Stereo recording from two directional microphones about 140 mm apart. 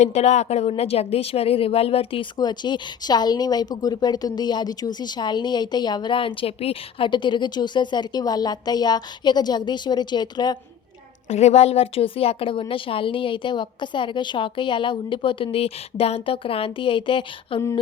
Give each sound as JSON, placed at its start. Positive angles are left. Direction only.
{"t": 0.0, "sound": "a woman's voice", "side_deg": 50}
{"t": 2.4, "sound": "a woman's voice", "side_deg": 30}
{"t": 11.3, "sound": "a woman's voice", "side_deg": 50}